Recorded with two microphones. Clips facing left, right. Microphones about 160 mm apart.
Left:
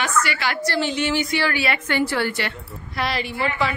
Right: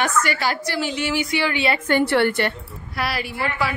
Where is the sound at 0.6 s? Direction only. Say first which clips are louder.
Left 2 dB; 10° right (ahead or behind); by 1.8 s 25° right (ahead or behind).